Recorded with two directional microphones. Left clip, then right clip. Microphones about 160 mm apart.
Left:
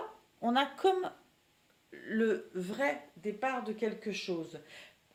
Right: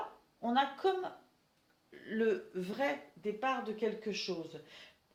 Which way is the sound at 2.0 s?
40° left (ahead or behind).